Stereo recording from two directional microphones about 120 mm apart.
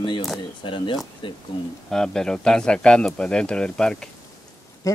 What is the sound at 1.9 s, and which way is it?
A man's voice, 5° left (ahead or behind).